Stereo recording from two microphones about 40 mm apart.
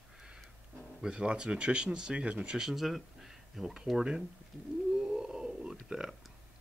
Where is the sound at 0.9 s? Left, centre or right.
Right.